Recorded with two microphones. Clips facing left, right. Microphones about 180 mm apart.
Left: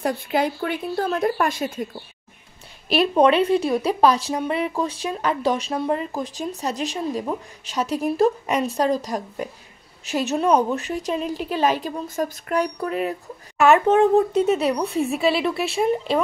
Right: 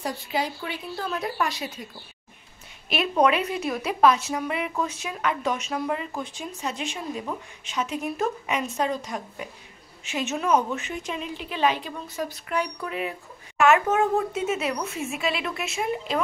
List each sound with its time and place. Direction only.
0.0 s speech: 55° left (ahead or behind)
2.9 s a woman's voice: 30° left (ahead or behind)